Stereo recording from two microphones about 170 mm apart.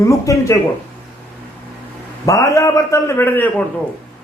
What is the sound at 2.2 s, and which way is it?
A man's voice, 20° left (ahead or behind).